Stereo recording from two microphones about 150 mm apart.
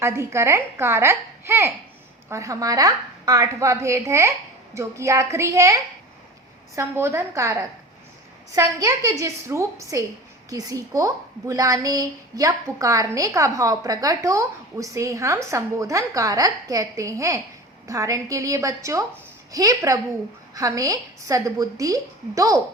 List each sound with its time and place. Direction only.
0.0 s a child's voice: 20° right (ahead or behind)